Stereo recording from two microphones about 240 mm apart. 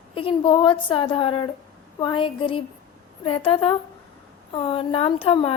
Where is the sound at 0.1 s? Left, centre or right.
Left.